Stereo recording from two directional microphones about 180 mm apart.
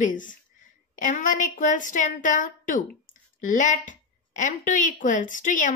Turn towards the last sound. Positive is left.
turn(degrees=45)  # may be behind; listen again after turning